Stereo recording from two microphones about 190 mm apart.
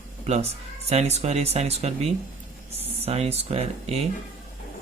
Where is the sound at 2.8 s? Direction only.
30° right (ahead or behind).